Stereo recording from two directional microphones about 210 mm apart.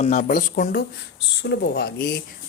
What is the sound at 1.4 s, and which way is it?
Speech, 55° left (ahead or behind).